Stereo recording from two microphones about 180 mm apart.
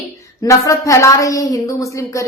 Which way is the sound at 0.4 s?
15° left (ahead or behind).